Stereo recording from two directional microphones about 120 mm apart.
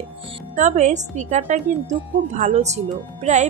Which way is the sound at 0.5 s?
90° right.